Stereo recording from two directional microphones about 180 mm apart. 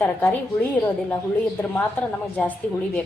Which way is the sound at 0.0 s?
10° left (ahead or behind).